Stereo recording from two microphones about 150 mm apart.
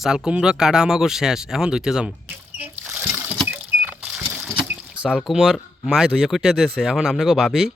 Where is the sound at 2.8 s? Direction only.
10° right (ahead or behind).